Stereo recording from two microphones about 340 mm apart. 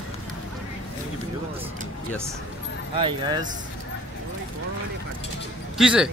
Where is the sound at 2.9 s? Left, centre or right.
Centre.